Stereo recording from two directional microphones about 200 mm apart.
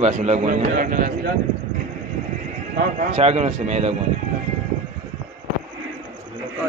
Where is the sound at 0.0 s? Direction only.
35° right (ahead or behind).